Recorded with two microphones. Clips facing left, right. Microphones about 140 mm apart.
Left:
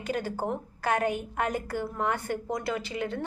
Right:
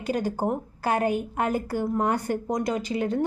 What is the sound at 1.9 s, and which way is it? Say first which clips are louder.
Speech: right 5 dB; 40° right (ahead or behind).